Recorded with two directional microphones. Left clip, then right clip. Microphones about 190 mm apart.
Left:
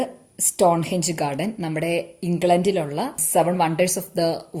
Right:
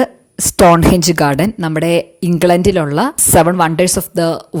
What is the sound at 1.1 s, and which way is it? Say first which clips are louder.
Speech: right 11 dB; 50° right (ahead or behind).